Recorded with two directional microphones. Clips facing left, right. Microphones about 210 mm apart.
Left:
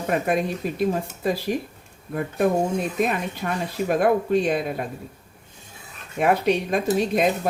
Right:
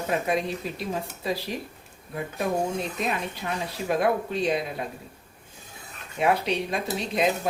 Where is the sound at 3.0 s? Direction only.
50° left (ahead or behind).